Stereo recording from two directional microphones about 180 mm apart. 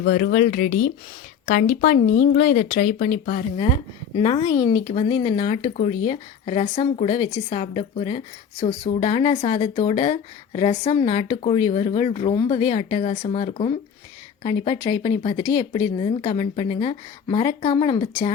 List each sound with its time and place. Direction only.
0.0 s speech: 55° left (ahead or behind)
4.2 s speech: 25° left (ahead or behind)